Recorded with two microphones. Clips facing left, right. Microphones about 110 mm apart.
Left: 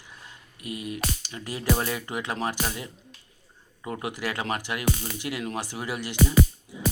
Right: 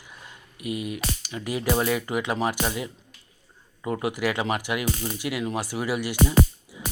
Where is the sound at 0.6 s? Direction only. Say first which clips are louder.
Right 4 dB; 40° left (ahead or behind).